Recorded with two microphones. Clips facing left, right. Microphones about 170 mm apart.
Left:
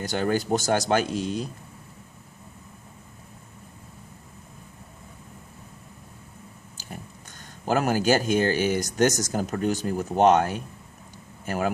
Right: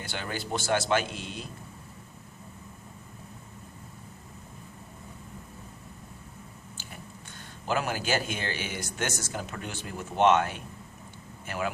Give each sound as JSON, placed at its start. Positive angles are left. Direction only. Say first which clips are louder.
{"t": 0.0, "sound": "speech", "louder": "left 11 dB", "side_deg": 40}
{"t": 7.6, "sound": "speech", "louder": "left 7 dB", "side_deg": 45}